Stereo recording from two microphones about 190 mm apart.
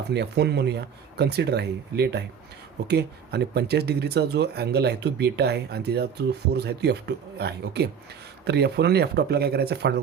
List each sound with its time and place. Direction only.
0.1 s speech: 60° right (ahead or behind)